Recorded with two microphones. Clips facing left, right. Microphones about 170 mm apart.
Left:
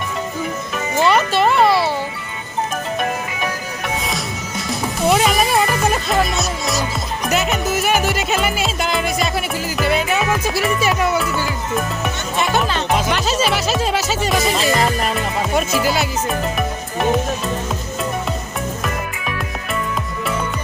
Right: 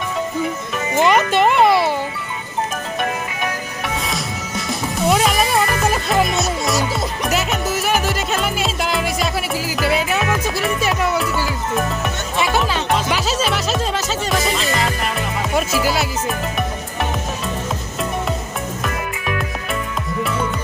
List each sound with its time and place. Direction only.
1.0 s a sound: 15° right (ahead or behind)
4.0 s music: centre (ahead or behind)
7.3 s music: centre (ahead or behind)
15.5 s speech: centre (ahead or behind)